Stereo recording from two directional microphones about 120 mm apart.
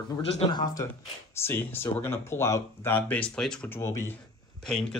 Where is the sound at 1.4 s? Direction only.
20° left (ahead or behind).